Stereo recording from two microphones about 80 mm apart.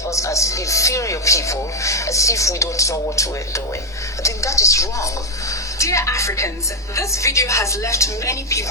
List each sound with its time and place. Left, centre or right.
0.1 s a woman's voice: left